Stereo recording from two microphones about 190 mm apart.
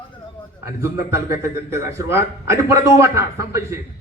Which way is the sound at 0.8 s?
15° right (ahead or behind).